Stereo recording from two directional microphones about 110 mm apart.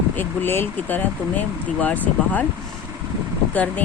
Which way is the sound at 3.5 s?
15° left (ahead or behind).